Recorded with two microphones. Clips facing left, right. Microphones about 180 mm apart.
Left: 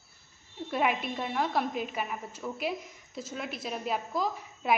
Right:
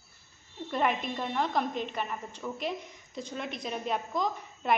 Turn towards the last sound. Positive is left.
turn(degrees=5)  # may be behind; listen again after turning